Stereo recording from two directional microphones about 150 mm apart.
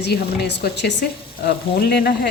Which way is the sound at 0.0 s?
90° left.